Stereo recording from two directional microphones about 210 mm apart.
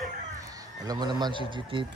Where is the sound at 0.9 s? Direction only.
20° right (ahead or behind).